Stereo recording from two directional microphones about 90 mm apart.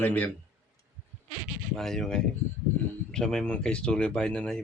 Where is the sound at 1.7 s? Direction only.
5° left (ahead or behind).